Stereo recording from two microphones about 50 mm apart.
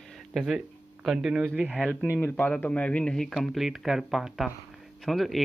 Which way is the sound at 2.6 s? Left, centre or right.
Left.